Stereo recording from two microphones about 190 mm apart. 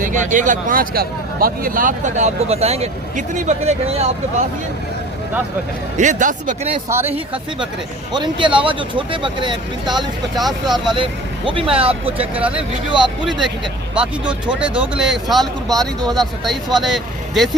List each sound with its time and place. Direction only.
0.0 s speech: 40° right (ahead or behind)
6.0 s speech: 40° right (ahead or behind)
8.1 s speech: 25° right (ahead or behind)
10.3 s speech: centre (ahead or behind)
10.9 s speech: 25° right (ahead or behind)
12.0 s speech: 10° right (ahead or behind)